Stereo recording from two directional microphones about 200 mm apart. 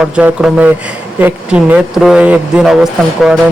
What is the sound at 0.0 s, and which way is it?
A man's voice, 5° right (ahead or behind).